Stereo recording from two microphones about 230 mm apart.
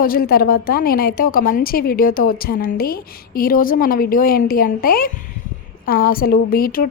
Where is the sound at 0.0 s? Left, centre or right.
Left.